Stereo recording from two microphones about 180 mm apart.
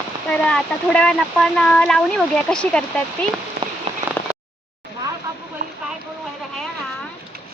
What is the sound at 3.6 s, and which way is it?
Rain on surface, 60° right (ahead or behind).